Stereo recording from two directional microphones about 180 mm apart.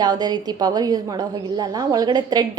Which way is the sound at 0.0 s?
20° right (ahead or behind).